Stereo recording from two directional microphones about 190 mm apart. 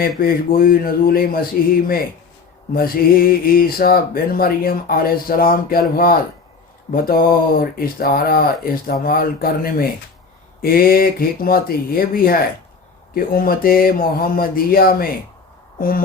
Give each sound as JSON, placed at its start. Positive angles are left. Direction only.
{"t": 0.2, "sound": "speech", "side_deg": 50}
{"t": 2.7, "sound": "speech", "side_deg": 50}
{"t": 6.9, "sound": "speech", "side_deg": 50}